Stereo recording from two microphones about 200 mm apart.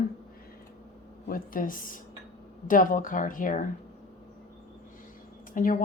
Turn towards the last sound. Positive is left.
turn(degrees=40)  # may be behind; listen again after turning